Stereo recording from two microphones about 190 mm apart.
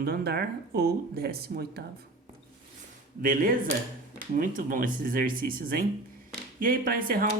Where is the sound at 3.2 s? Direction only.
45° right (ahead or behind).